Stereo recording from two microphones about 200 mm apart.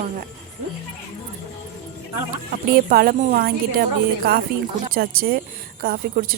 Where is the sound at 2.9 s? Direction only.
45° right (ahead or behind).